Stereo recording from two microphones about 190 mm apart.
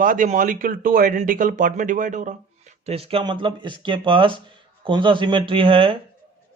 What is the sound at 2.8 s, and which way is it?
Speech, 30° right (ahead or behind).